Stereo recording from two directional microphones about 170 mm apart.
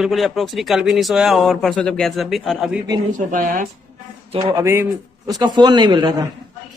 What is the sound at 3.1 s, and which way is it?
Speech, 55° right (ahead or behind).